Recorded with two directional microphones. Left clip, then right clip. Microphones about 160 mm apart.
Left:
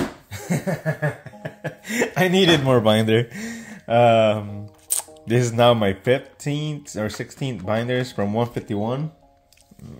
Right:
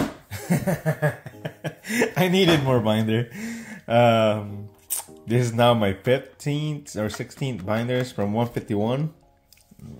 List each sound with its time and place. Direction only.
0.3 s a sound: centre (ahead or behind)
2.1 s speech: 20° left (ahead or behind); by 3.3 s 40° left (ahead or behind)
3.3 s speech: 20° left (ahead or behind)
8.7 s speech: 10° right (ahead or behind)